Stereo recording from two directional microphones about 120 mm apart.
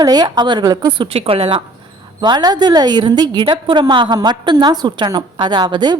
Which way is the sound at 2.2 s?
35° right (ahead or behind).